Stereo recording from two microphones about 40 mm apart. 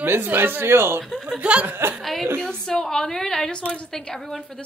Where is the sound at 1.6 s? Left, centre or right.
Right.